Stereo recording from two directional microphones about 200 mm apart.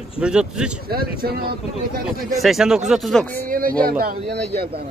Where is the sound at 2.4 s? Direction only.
Centre (ahead or behind).